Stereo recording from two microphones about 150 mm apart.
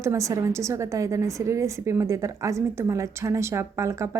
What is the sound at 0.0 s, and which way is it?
A woman's voice, 20° right (ahead or behind).